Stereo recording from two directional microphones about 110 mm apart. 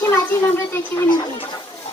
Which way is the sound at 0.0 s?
20° left (ahead or behind).